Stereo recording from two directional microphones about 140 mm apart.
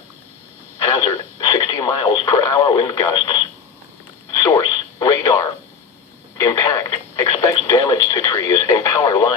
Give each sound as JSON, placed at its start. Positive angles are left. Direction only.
{"t": 0.8, "sound": "radio", "side_deg": 20}